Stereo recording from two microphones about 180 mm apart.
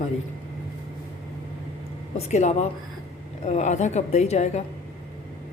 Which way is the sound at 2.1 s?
40° left (ahead or behind).